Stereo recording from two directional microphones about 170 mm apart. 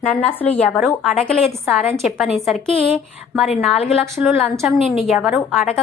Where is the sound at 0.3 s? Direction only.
35° left (ahead or behind).